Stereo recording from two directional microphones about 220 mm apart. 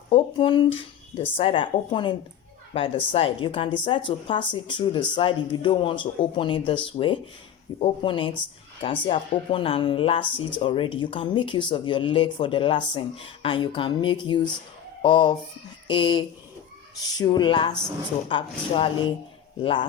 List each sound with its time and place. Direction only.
0.1 s speech: 25° left (ahead or behind)